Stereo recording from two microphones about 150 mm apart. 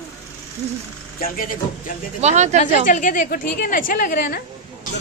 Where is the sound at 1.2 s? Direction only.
70° left (ahead or behind).